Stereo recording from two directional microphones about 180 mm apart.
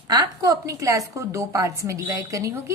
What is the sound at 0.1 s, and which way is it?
A woman's voice, 20° right (ahead or behind).